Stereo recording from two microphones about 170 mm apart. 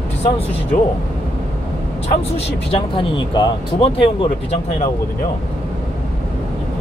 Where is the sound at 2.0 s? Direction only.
35° left (ahead or behind).